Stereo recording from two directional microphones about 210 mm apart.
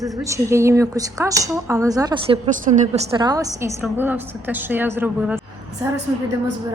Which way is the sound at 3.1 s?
20° right (ahead or behind).